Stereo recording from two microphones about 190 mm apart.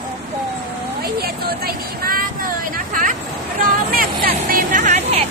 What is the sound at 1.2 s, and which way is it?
Vehicle, 55° right (ahead or behind).